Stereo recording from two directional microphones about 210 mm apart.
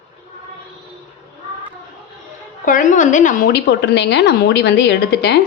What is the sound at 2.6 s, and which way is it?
A woman's voice, 40° left (ahead or behind).